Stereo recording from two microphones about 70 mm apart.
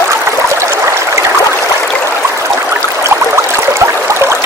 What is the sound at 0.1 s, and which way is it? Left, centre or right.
Stream, right.